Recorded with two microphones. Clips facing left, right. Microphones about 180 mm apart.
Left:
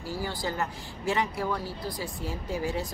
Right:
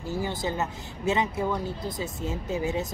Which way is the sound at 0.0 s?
20° right (ahead or behind).